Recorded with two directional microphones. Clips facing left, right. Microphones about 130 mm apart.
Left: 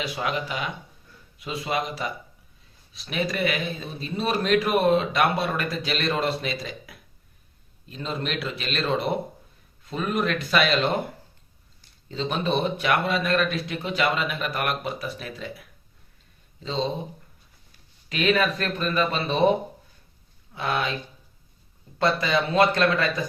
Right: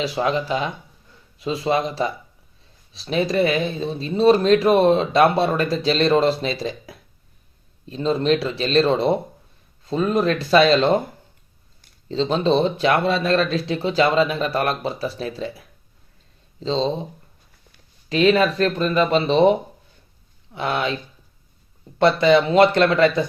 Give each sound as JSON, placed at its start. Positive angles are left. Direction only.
{"t": 0.0, "sound": "speech", "side_deg": -30}
{"t": 12.0, "sound": "speech", "side_deg": -30}
{"t": 18.1, "sound": "speech", "side_deg": -30}
{"t": 21.9, "sound": "speech", "side_deg": -25}